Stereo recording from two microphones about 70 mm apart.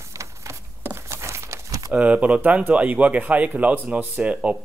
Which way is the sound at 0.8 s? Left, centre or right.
Right.